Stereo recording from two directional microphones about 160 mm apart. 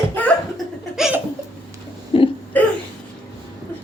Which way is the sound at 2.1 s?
35° left (ahead or behind).